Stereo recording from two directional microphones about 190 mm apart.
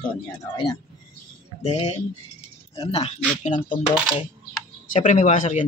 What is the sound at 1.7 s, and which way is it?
Speech, 35° left (ahead or behind).